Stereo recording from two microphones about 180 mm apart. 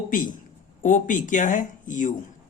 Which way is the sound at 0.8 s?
45° left (ahead or behind).